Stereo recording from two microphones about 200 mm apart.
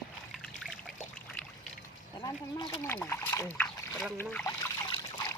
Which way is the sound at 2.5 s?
25° left (ahead or behind).